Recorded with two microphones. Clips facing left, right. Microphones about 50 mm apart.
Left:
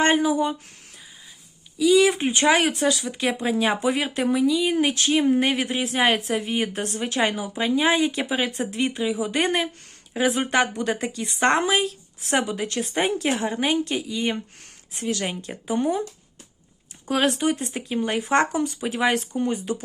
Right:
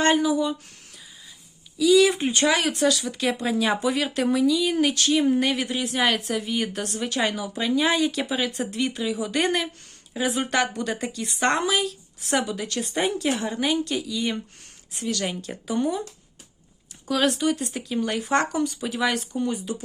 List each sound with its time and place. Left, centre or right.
0.0 s speech: left
1.8 s speech: left
2.7 s speech: centre
10.2 s speech: left
10.4 s speech: left
17.1 s speech: left